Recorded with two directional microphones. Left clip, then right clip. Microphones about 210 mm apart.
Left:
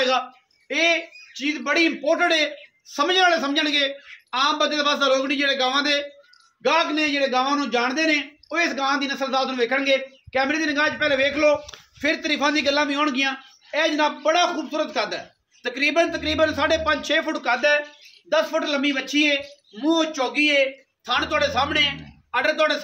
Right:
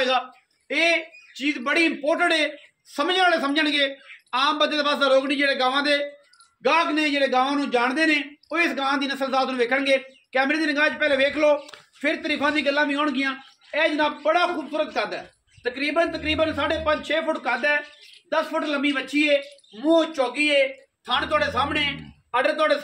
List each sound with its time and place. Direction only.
0.7 s a man's voice: centre (ahead or behind); by 11.5 s 15° left (ahead or behind)
12.0 s speech: 35° left (ahead or behind)